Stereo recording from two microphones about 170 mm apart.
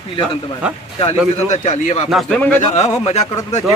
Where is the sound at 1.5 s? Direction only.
45° left (ahead or behind).